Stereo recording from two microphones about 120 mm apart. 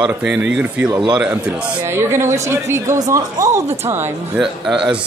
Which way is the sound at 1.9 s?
20° right (ahead or behind).